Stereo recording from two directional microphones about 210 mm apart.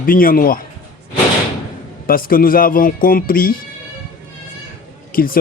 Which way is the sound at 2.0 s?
45° left (ahead or behind).